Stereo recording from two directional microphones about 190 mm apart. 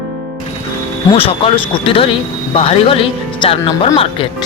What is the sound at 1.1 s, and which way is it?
Speech, 30° left (ahead or behind).